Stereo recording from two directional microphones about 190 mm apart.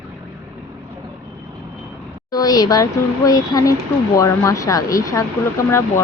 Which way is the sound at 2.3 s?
20° left (ahead or behind).